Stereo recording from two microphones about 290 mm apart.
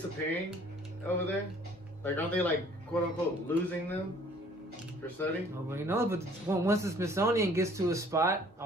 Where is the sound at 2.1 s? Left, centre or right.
Centre.